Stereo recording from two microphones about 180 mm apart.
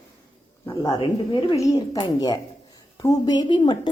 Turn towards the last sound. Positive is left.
turn(degrees=25)  # may be behind; listen again after turning